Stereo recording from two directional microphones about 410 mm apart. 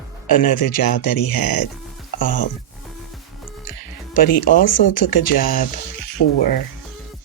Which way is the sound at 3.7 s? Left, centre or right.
Left.